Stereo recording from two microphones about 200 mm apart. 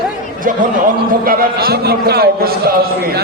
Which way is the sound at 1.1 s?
45° right (ahead or behind).